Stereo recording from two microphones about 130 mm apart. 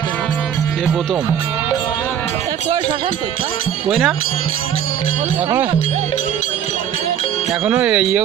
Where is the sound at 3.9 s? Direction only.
5° right (ahead or behind).